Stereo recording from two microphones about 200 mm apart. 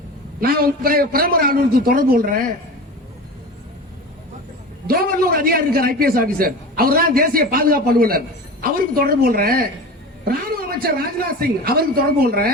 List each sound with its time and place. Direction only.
0.3 s a man's voice: 50° right (ahead or behind)
4.9 s a man's voice: 45° right (ahead or behind)